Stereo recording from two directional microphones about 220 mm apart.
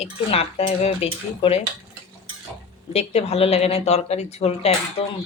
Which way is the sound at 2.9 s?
30° left (ahead or behind).